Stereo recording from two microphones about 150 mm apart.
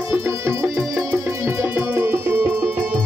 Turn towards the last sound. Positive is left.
turn(degrees=-15)  # may be behind; listen again after turning